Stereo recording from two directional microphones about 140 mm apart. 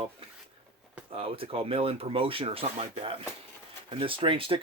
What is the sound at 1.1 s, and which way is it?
Speech, 40° right (ahead or behind).